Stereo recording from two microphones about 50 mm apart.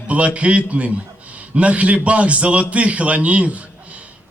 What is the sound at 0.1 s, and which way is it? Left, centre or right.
A man's voice, right.